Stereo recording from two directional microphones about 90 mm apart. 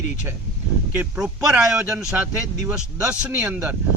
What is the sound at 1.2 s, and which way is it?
A man's voice, 10° right (ahead or behind).